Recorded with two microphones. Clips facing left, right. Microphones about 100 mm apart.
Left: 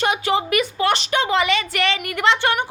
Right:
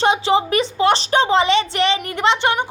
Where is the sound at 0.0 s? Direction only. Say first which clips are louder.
Right 4 dB; 25° right (ahead or behind).